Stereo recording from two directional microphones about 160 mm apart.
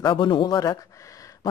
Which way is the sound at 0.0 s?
30° left (ahead or behind).